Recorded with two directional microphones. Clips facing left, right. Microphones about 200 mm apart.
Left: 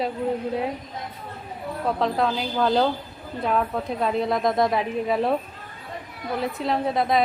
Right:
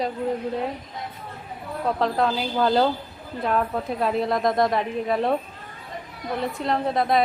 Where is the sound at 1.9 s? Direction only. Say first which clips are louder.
Right 1 dB; centre (ahead or behind).